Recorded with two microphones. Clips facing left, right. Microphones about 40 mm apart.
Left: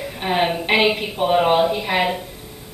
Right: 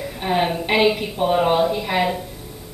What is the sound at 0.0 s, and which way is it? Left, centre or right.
A woman's voice, left.